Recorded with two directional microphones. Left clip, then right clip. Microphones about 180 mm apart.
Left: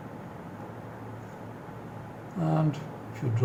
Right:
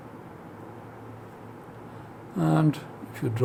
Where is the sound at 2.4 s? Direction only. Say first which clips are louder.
Right 5 dB; 60° right (ahead or behind).